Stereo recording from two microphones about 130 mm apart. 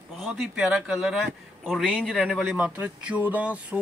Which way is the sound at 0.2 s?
5° right (ahead or behind).